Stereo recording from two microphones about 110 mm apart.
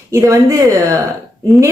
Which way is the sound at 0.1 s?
30° right (ahead or behind).